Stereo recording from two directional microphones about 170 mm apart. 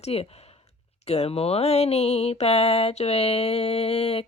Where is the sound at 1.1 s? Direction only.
35° left (ahead or behind).